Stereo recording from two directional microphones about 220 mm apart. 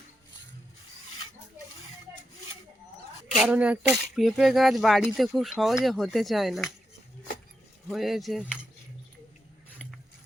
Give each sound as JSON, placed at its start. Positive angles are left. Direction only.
{"t": 3.3, "sound": "speech", "side_deg": -5}
{"t": 7.9, "sound": "speech", "side_deg": 0}